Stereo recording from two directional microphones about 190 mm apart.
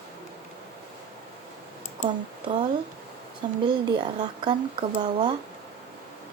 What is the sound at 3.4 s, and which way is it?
A woman's voice, 25° right (ahead or behind).